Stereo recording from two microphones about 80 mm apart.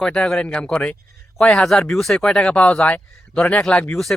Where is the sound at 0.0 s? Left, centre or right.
Centre.